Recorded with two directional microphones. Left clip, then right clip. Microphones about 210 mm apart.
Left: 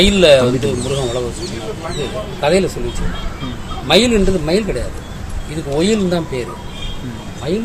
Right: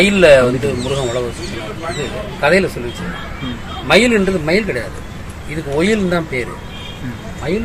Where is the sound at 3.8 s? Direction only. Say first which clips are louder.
Right 1 dB; 20° left (ahead or behind).